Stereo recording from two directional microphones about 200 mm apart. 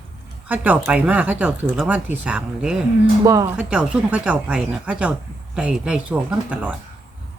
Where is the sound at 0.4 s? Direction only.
10° right (ahead or behind).